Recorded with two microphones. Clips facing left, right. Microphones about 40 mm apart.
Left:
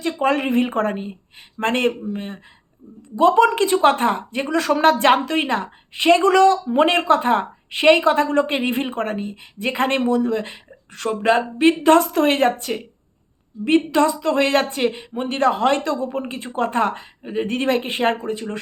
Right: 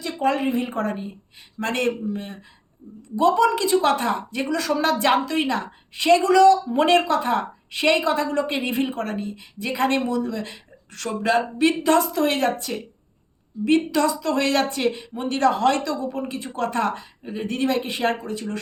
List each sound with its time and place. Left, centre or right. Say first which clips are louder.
0.0 s a woman's voice: left 2 dB; left
6.7 s a woman's voice: left 2 dB; left